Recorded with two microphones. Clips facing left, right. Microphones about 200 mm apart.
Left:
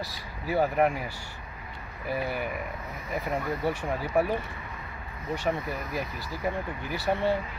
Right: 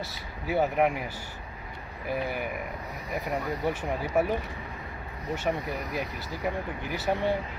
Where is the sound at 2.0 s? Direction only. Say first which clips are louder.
Even; 15° right (ahead or behind).